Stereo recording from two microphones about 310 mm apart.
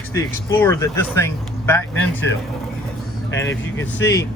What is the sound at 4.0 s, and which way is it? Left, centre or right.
Speech, left.